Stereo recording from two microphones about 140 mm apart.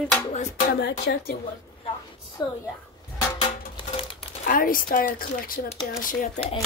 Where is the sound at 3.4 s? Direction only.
40° left (ahead or behind).